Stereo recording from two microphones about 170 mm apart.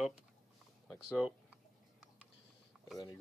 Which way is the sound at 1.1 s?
5° right (ahead or behind).